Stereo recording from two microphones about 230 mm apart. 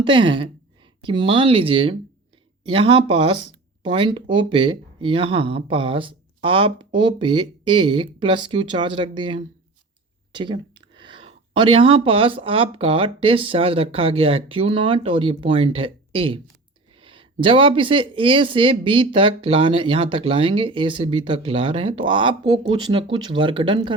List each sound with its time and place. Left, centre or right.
0.0 s speech: right